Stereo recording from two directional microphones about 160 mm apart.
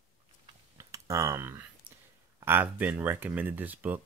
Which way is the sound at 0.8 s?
20° right (ahead or behind).